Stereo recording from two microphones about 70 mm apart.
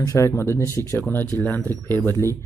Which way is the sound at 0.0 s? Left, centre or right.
Left.